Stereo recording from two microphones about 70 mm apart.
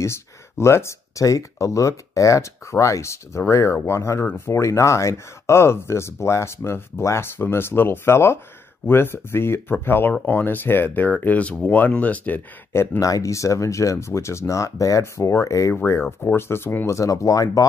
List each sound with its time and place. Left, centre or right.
0.0 s speech: left
13.0 s speech: left
16.3 s speech: left